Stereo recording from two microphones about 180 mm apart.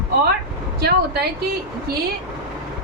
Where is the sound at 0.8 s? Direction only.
65° right (ahead or behind).